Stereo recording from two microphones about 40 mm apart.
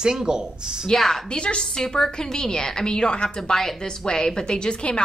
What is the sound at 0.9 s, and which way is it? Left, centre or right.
Speech, centre.